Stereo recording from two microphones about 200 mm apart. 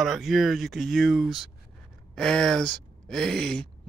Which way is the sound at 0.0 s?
Centre (ahead or behind).